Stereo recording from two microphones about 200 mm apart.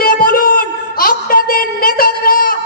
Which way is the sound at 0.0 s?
45° left (ahead or behind).